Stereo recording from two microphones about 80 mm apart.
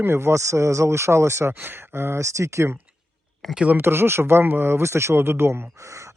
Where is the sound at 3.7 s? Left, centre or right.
Right.